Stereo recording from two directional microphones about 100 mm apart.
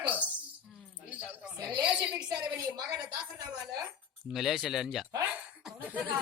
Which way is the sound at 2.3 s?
40° right (ahead or behind).